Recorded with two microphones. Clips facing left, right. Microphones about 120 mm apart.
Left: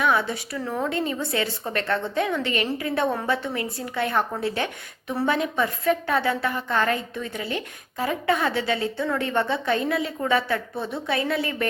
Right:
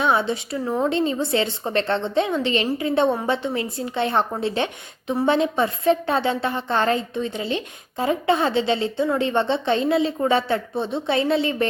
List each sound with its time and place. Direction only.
0.0 s a woman's voice: 25° right (ahead or behind)